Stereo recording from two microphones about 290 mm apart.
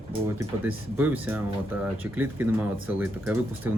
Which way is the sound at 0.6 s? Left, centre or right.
Centre.